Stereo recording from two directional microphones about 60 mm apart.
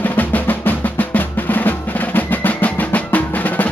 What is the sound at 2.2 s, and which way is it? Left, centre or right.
Music, left.